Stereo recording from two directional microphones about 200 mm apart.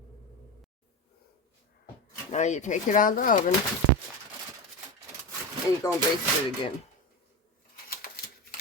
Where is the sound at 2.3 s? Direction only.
35° left (ahead or behind).